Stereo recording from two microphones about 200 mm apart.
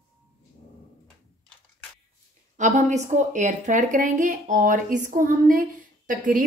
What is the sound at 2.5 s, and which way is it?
A woman's voice, 35° right (ahead or behind).